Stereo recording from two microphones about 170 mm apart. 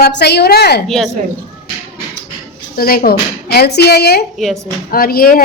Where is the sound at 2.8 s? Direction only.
60° left (ahead or behind).